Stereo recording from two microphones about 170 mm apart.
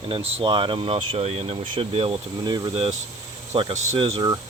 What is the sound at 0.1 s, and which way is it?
Speech, 35° right (ahead or behind).